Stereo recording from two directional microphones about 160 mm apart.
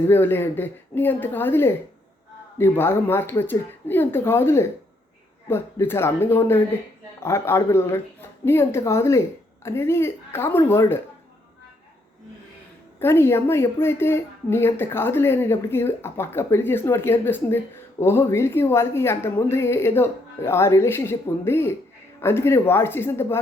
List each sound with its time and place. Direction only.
0.1 s a woman's voice: 10° left (ahead or behind)
13.0 s a woman's voice: 15° left (ahead or behind)